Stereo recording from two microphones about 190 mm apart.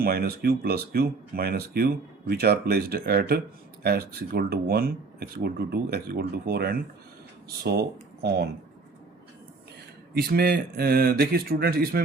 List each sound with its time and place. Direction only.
0.0 s speech: 55° right (ahead or behind)
10.2 s speech: 55° right (ahead or behind)